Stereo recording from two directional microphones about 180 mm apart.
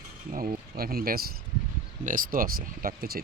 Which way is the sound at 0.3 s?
50° right (ahead or behind).